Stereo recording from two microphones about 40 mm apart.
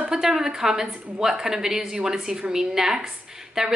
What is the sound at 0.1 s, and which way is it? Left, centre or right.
A woman's voice, centre.